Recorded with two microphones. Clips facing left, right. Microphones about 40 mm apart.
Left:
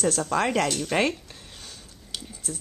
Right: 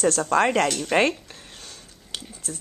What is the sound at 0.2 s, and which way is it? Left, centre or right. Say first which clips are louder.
Speech: right 4 dB; centre.